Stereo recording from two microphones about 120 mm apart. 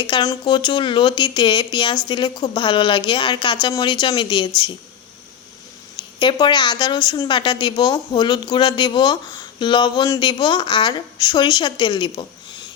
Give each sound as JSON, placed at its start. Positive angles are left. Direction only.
{"t": 0.1, "sound": "a woman's voice", "side_deg": 40}
{"t": 6.0, "sound": "a sound", "side_deg": 40}
{"t": 6.3, "sound": "a woman's voice", "side_deg": 40}